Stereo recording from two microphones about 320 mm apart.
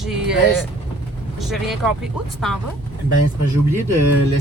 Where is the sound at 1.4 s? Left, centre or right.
Centre.